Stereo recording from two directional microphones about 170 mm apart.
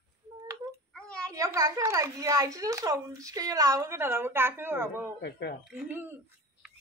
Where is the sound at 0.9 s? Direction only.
5° left (ahead or behind).